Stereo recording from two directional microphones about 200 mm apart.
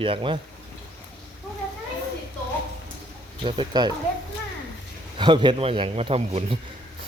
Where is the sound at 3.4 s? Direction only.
25° right (ahead or behind).